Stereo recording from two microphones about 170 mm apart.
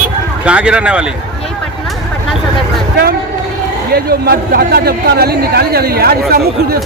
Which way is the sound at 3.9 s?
65° right (ahead or behind).